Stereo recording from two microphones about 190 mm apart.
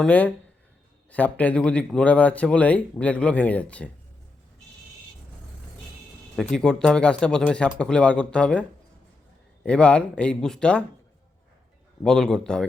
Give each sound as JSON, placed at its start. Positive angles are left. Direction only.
{"t": 0.0, "sound": "speech", "side_deg": 10}
{"t": 6.3, "sound": "speech", "side_deg": 5}
{"t": 9.6, "sound": "speech", "side_deg": 5}
{"t": 12.0, "sound": "speech", "side_deg": 5}